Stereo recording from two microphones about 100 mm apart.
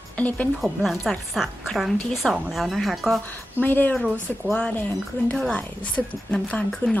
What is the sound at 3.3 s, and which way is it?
Speech, 20° left (ahead or behind).